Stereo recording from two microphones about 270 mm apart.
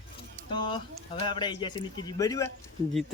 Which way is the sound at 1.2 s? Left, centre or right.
Centre.